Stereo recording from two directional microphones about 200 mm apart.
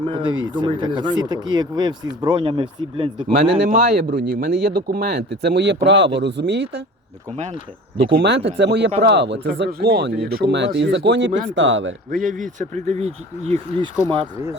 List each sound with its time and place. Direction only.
0.0 s speech: 25° right (ahead or behind)
3.7 s speech: 50° right (ahead or behind)
8.1 s speech: 60° right (ahead or behind)
11.3 s speech: 40° right (ahead or behind)
11.5 s speech: 70° right (ahead or behind)
12.1 s speech: 40° right (ahead or behind)